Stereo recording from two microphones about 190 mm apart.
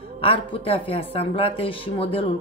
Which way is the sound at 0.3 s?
30° left (ahead or behind).